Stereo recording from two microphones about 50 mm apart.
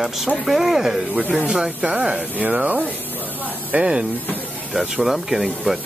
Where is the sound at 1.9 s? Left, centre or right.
Right.